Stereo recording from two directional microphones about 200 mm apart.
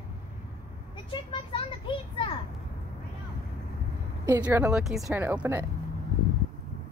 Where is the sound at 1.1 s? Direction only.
25° left (ahead or behind).